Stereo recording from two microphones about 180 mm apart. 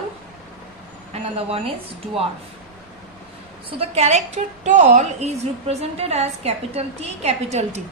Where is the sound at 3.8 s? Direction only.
40° right (ahead or behind).